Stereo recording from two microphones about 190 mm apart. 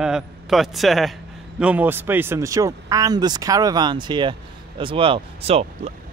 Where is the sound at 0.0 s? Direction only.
Centre (ahead or behind).